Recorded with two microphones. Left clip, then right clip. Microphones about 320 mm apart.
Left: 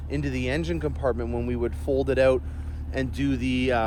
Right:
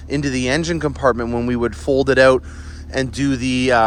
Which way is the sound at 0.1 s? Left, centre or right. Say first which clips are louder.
Right 9 dB; right.